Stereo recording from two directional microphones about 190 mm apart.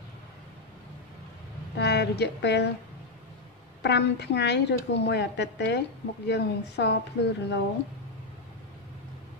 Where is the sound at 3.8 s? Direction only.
60° left (ahead or behind).